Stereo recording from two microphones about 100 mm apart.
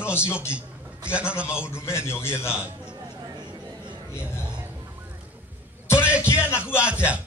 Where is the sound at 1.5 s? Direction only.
25° left (ahead or behind).